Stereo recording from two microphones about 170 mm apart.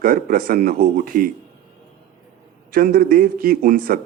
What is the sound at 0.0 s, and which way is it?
A man's voice, 55° right (ahead or behind).